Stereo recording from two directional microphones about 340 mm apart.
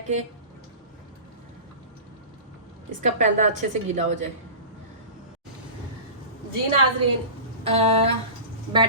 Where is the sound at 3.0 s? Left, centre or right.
Right.